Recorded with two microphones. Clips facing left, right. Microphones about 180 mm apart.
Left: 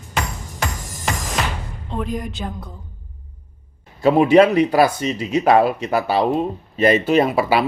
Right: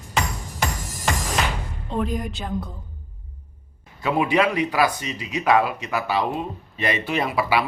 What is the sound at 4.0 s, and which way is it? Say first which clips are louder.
Speech: left 8 dB; 35° left (ahead or behind).